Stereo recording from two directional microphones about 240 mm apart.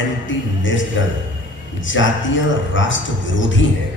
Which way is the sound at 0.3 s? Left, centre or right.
Left.